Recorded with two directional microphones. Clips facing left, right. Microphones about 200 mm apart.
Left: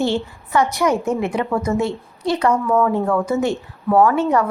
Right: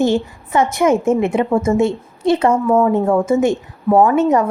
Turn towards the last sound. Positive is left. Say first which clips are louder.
# right 3 dB
turn(degrees=-20)  # may be behind; listen again after turning